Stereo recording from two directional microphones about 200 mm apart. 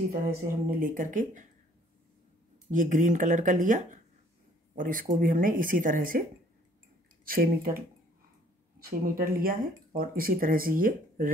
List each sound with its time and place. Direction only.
0.1 s speech: 45° right (ahead or behind)
2.7 s speech: 40° right (ahead or behind)
7.2 s speech: 45° right (ahead or behind)